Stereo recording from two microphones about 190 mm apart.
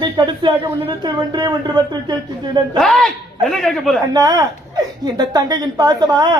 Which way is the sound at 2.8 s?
Centre (ahead or behind).